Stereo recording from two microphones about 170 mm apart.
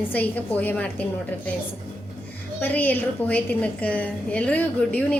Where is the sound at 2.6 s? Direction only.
10° left (ahead or behind).